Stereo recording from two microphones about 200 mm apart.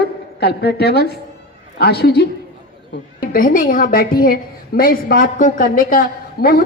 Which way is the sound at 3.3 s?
45° left (ahead or behind).